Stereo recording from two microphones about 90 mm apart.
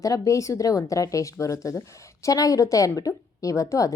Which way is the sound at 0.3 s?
35° left (ahead or behind).